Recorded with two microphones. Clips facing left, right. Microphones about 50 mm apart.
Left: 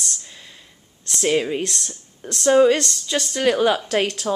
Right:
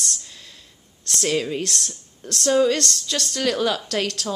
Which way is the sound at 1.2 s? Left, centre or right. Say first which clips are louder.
Left 3 dB; centre.